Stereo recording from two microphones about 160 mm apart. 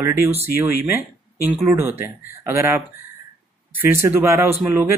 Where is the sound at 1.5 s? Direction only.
Centre (ahead or behind).